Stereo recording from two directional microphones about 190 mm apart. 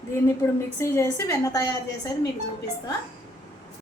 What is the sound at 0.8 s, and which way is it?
Speech, 15° left (ahead or behind).